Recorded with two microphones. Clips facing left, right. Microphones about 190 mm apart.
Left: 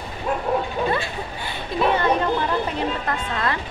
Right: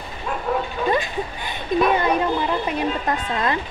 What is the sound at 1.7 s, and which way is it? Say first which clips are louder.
Speech: right 4 dB; 20° right (ahead or behind).